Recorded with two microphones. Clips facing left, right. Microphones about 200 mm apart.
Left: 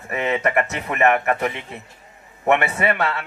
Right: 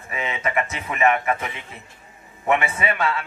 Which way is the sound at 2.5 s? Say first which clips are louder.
Left 3 dB; 65° left (ahead or behind).